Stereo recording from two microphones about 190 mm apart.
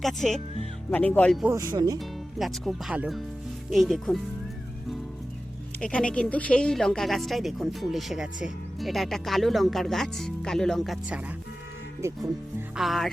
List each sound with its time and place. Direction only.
0.0 s a woman's voice: centre (ahead or behind)
1.5 s speech: 15° right (ahead or behind)
2.0 s a woman's voice: centre (ahead or behind)
5.8 s a woman's voice: 5° left (ahead or behind)
12.0 s speech: 15° right (ahead or behind)
12.7 s a woman's voice: centre (ahead or behind)